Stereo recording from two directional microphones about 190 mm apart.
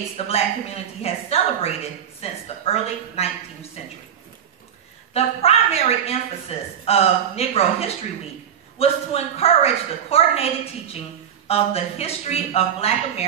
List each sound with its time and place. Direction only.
0.3 s a woman's voice: 30° left (ahead or behind)
5.1 s a woman's voice: 30° left (ahead or behind)